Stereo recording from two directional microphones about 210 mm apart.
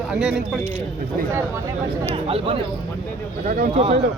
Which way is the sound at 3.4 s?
45° right (ahead or behind).